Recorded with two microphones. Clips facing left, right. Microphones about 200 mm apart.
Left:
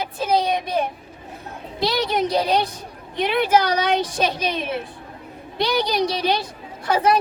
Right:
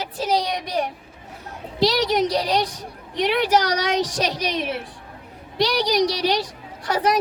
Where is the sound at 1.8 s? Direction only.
80° right.